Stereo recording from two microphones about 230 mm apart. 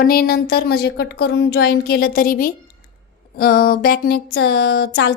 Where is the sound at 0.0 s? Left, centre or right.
Left.